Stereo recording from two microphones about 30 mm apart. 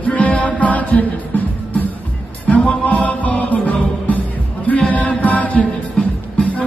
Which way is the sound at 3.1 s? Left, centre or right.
Left.